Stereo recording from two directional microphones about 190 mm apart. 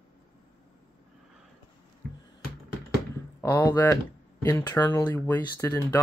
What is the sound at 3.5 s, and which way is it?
Speech, 10° left (ahead or behind).